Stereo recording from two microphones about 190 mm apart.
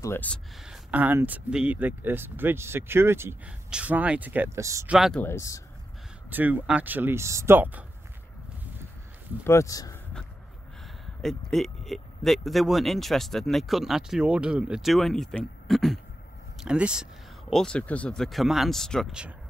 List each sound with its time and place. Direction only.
0.0 s speech: 10° left (ahead or behind)
0.6 s speech: 5° right (ahead or behind)
4.9 s speech: centre (ahead or behind)
5.2 s speech: 15° left (ahead or behind)
6.3 s speech: 10° right (ahead or behind)
9.4 s speech: 15° left (ahead or behind)
10.8 s speech: centre (ahead or behind)